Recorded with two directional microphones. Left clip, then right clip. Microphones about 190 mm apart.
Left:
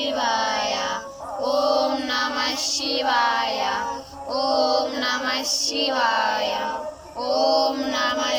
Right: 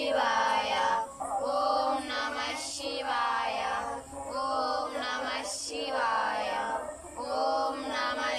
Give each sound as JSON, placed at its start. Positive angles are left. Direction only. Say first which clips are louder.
{"t": 0.0, "sound": "music", "louder": "left 4 dB", "side_deg": 25}
{"t": 1.5, "sound": "child singing", "louder": "left 8 dB", "side_deg": 35}
{"t": 4.4, "sound": "male singing", "louder": "left 10 dB", "side_deg": 45}
{"t": 4.7, "sound": "female singing", "louder": "left 10 dB", "side_deg": 45}
{"t": 7.3, "sound": "chant", "louder": "left 10 dB", "side_deg": 40}